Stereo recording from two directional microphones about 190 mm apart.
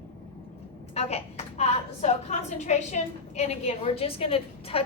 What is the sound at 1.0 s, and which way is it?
A woman's voice, 35° left (ahead or behind).